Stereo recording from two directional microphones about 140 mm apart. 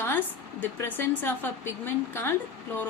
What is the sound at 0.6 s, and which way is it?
A woman's voice, 15° left (ahead or behind).